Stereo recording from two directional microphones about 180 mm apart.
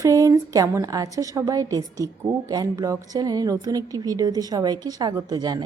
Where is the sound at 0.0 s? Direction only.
20° right (ahead or behind).